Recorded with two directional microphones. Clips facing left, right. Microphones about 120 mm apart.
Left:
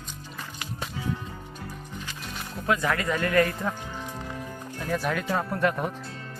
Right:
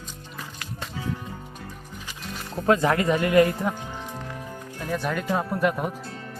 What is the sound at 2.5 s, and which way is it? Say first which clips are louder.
Speech: right 5 dB; 35° right (ahead or behind).